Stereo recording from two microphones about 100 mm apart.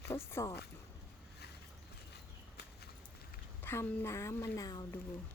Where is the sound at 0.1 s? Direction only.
25° left (ahead or behind).